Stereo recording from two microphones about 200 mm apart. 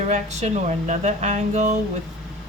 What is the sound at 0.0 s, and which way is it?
Speech, 35° right (ahead or behind).